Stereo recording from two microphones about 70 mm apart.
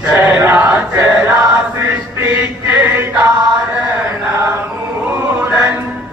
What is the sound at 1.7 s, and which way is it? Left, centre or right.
Chant, right.